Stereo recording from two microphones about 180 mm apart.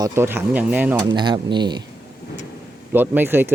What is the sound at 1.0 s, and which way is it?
Speech, 25° right (ahead or behind).